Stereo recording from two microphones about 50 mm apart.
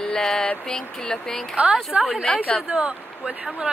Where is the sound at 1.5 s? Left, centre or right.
Centre.